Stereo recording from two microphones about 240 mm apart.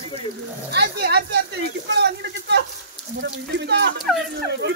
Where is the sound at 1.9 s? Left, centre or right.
Right.